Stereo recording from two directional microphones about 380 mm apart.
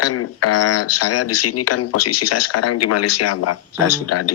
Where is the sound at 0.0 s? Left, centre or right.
Left.